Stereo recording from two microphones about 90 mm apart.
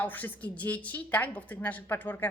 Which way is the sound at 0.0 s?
20° left (ahead or behind).